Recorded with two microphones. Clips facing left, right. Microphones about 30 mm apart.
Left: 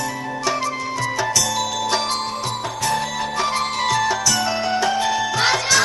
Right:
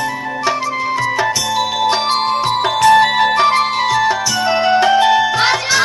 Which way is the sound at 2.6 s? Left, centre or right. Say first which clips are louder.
Right 14 dB; right.